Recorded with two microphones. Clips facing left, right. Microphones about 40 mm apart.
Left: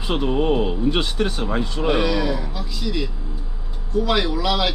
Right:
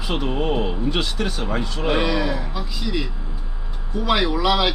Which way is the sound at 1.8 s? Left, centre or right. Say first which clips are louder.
Left 1 dB; centre.